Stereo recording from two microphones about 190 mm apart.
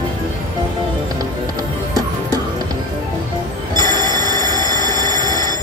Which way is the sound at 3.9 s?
20° right (ahead or behind).